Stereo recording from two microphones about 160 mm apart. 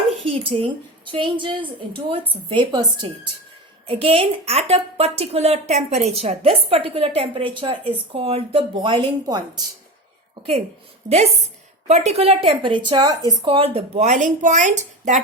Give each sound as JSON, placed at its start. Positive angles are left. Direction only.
{"t": 0.3, "sound": "a woman's voice", "side_deg": -35}
{"t": 11.9, "sound": "speech", "side_deg": -45}